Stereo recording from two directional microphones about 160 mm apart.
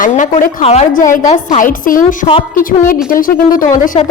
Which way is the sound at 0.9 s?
55° left (ahead or behind).